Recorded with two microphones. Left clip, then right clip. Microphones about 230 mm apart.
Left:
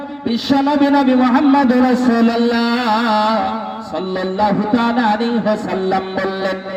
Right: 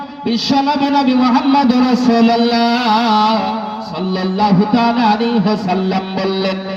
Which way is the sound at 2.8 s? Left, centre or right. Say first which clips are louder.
Right 1 dB; right.